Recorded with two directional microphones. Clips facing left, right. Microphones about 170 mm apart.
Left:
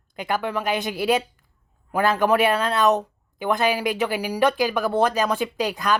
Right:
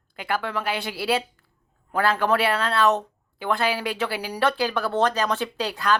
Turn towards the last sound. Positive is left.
turn(degrees=15)  # may be behind; listen again after turning